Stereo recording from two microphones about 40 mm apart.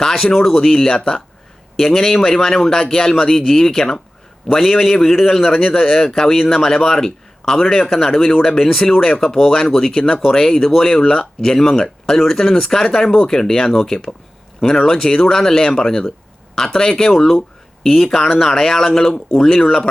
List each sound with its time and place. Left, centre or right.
0.0 s a sound: centre
0.3 s speech: centre
4.4 s a man's voice: centre
17.2 s speech: centre